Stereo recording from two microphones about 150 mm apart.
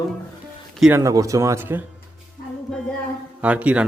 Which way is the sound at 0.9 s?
20° right (ahead or behind).